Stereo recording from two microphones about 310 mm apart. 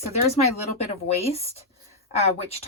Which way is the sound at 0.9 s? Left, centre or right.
Centre.